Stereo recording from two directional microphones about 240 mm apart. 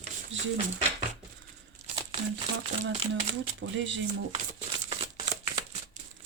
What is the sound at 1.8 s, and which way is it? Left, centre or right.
Crumpling, right.